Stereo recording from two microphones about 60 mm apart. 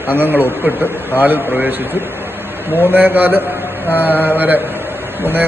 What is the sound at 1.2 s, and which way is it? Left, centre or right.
Speech, right.